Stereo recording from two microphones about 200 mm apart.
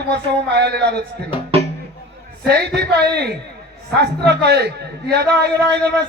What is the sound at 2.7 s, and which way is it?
Speech, 55° right (ahead or behind).